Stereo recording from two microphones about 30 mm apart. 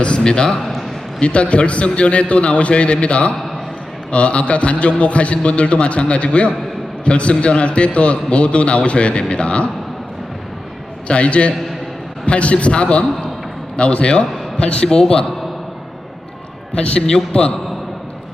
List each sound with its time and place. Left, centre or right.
0.6 s a sound: centre
1.2 s a man's voice: left
11.1 s a man's voice: left
14.8 s a man's voice: left
16.7 s a man's voice: left